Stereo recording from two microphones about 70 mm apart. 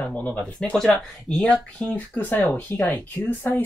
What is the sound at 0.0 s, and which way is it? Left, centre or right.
Speech, left.